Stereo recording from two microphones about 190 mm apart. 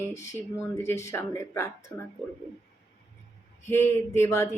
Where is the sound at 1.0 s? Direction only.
15° left (ahead or behind).